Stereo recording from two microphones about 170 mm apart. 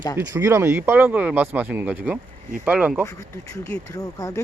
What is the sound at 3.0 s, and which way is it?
Speech, 20° left (ahead or behind).